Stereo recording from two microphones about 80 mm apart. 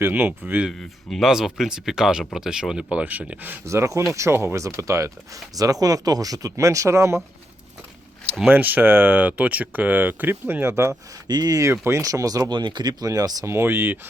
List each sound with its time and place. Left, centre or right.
0.0 s speech: right
0.7 s speech: centre; by 3.6 s right
3.7 s speech: right
5.5 s speech: right
8.4 s speech: right
11.3 s speech: right
11.7 s speech: right
12.5 s speech: right
12.9 s speech: right
13.4 s speech: right